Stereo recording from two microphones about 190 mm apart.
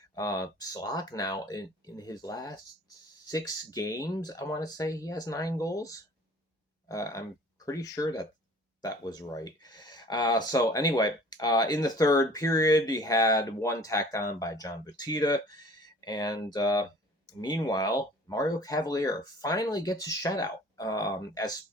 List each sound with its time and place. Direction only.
0.1 s speech: 20° left (ahead or behind)